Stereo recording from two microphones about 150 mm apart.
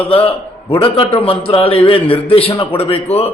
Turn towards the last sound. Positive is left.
turn(degrees=40)  # may be behind; listen again after turning